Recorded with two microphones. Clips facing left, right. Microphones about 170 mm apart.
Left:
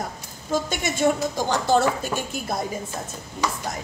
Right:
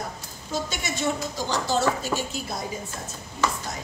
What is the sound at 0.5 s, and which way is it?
Speech, 50° left (ahead or behind).